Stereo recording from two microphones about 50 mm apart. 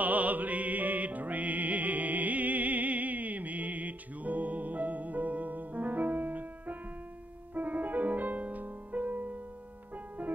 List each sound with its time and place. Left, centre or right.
0.0 s music: right